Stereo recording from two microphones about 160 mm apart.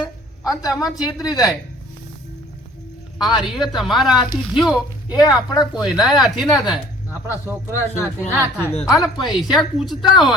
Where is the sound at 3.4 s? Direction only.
Centre (ahead or behind).